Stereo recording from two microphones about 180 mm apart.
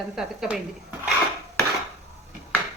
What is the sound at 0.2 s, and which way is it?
Speech, 5° right (ahead or behind).